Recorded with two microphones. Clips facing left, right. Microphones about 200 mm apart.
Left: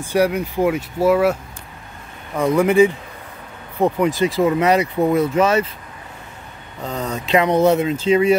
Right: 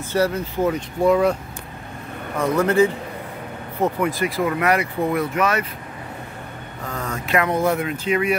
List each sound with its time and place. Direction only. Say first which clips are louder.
0.0 s speech: left 3 dB; 15° left (ahead or behind)
2.5 s speech: left 4 dB; 15° left (ahead or behind)
4.4 s speech: left 4 dB; 25° left (ahead or behind)
6.8 s speech: left 4 dB; 20° left (ahead or behind)